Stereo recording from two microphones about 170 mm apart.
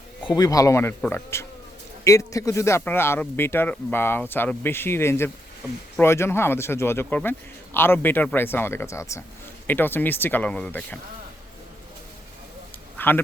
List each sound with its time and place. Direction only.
0.3 s speech: 20° left (ahead or behind)
13.0 s speech: 10° left (ahead or behind)